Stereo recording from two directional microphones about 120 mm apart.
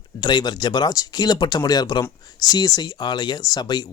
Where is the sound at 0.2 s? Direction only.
35° left (ahead or behind).